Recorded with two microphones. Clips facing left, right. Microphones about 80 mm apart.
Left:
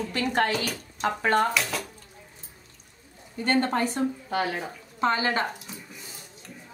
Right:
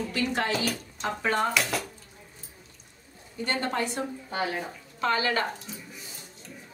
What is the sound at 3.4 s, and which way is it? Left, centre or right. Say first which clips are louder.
Speech: left 5 dB; left.